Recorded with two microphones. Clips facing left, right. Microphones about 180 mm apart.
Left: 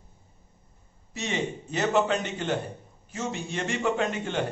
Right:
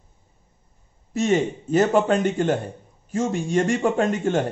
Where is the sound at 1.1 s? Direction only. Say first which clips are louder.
Right 10 dB; 45° right (ahead or behind).